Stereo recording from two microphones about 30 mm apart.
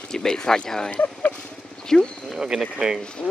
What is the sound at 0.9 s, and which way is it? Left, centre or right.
Speech, left.